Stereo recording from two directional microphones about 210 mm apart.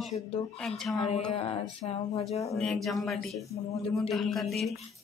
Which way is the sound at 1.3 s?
25° left (ahead or behind).